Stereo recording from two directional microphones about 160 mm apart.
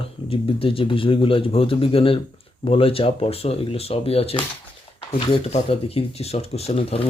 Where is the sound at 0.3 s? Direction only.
35° left (ahead or behind).